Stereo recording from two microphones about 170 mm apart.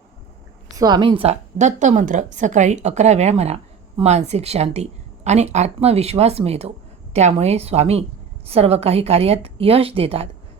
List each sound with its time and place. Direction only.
0.8 s a woman's voice: 25° right (ahead or behind)